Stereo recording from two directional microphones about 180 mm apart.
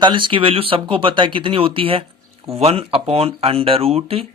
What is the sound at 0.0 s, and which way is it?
Speech, 25° right (ahead or behind).